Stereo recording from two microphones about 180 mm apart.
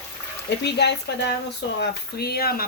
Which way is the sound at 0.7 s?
70° left (ahead or behind).